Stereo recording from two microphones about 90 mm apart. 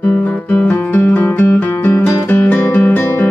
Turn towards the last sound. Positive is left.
turn(degrees=25)  # may be behind; listen again after turning